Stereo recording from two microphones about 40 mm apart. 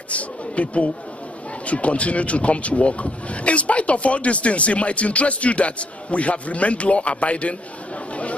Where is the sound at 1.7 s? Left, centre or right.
Left.